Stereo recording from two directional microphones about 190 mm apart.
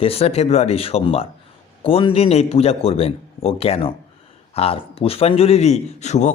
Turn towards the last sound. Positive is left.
turn(degrees=40)  # may be behind; listen again after turning